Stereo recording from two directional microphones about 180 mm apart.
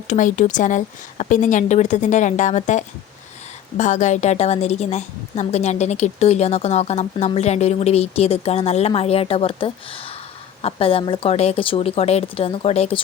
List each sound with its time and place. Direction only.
0.1 s a woman's voice: 45° left (ahead or behind)